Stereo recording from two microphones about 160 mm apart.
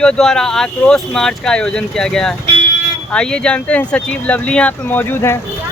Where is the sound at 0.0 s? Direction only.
5° left (ahead or behind).